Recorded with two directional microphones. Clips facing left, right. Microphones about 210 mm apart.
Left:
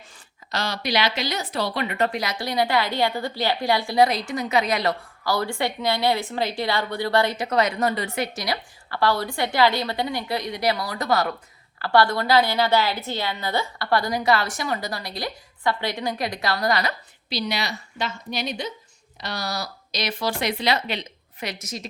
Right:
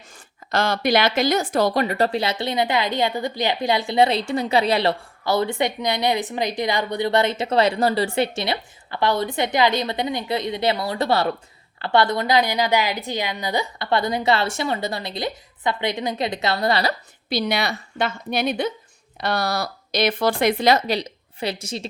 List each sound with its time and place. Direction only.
0.5 s a woman's voice: 50° right (ahead or behind); by 16.9 s 30° right (ahead or behind)
17.2 s speech: 55° right (ahead or behind); by 21.8 s 30° right (ahead or behind)